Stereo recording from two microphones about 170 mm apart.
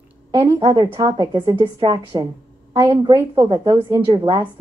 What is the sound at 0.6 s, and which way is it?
A woman's voice, 30° right (ahead or behind).